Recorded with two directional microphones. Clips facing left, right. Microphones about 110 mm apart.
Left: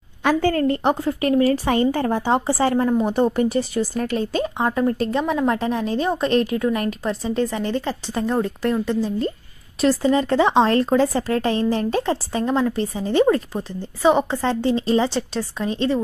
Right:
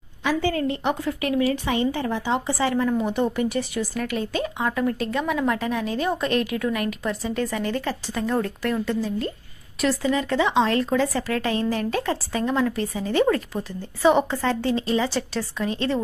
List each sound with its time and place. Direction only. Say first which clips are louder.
0.2 s a woman's voice: left 5 dB; 50° left (ahead or behind)
1.0 s a woman's voice: left 4 dB; 35° left (ahead or behind)
9.8 s a woman's voice: left 5 dB; 35° left (ahead or behind)